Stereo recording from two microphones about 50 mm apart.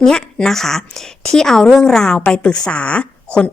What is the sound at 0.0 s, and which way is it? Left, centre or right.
A woman's voice, centre.